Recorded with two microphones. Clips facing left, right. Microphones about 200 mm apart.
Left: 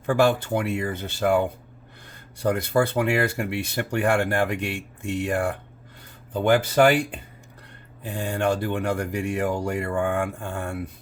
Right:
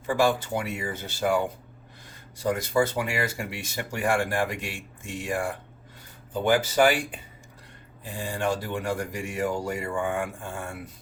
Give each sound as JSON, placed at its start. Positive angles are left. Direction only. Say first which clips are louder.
{"t": 0.0, "sound": "speech", "louder": "left 3 dB", "side_deg": 60}